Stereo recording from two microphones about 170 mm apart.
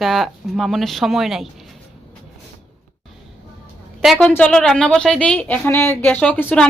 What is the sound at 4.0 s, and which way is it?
A woman's voice, 5° left (ahead or behind).